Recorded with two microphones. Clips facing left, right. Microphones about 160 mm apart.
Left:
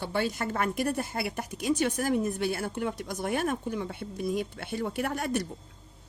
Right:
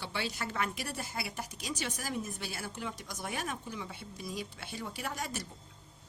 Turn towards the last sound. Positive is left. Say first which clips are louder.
# left 9 dB
turn(degrees=60)  # may be behind; listen again after turning